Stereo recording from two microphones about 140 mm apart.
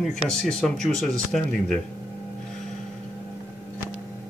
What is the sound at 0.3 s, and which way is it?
Speech, 5° left (ahead or behind).